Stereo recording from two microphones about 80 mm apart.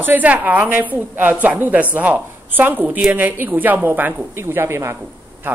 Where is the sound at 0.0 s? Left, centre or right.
Right.